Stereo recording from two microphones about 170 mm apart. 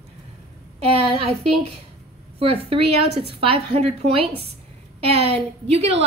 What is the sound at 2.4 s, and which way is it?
Speech, 35° right (ahead or behind).